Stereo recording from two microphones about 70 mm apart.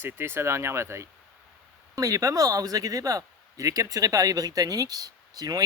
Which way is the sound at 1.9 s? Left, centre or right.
Right.